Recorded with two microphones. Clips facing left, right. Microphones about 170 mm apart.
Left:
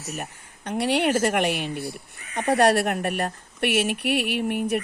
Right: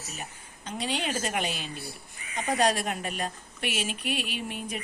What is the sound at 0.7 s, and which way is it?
Speech, 70° left (ahead or behind).